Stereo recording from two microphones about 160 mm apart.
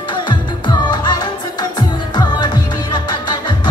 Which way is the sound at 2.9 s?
25° left (ahead or behind).